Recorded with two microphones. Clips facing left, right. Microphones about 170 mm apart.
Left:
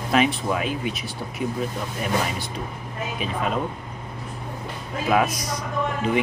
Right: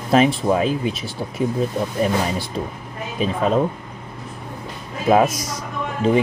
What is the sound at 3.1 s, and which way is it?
Speech, 35° right (ahead or behind).